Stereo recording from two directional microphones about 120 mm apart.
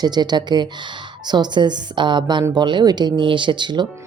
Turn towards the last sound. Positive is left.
turn(degrees=-40)  # may be behind; listen again after turning